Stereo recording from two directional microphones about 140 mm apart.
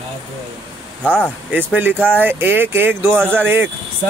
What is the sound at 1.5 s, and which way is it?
Speech, 15° right (ahead or behind).